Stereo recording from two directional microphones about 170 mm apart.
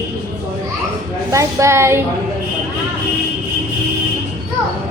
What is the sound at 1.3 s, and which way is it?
Speech, 15° right (ahead or behind).